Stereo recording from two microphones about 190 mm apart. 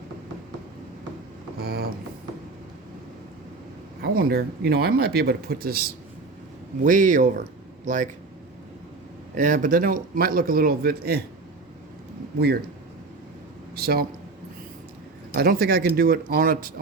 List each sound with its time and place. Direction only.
1.5 s a sound: 55° right (ahead or behind)
4.0 s speech: 50° right (ahead or behind)
9.3 s speech: 40° right (ahead or behind)
13.7 s speech: 55° right (ahead or behind)
15.4 s speech: 50° right (ahead or behind)